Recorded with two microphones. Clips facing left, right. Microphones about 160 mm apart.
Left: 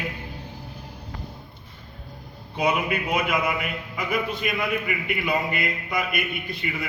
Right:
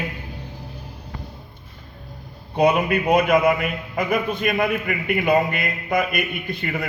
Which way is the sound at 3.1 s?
50° right (ahead or behind).